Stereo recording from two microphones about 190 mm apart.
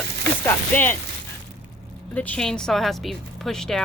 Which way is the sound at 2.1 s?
10° left (ahead or behind).